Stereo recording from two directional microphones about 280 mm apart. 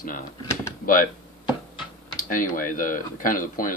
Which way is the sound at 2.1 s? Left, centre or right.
Left.